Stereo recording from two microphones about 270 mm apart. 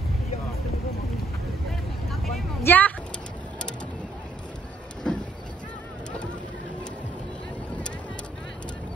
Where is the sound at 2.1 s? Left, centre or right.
Centre.